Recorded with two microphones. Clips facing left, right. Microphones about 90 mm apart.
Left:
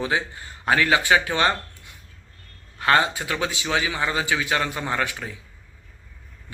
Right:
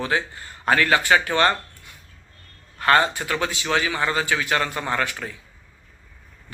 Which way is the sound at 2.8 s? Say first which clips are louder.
Right 1 dB; 15° left (ahead or behind).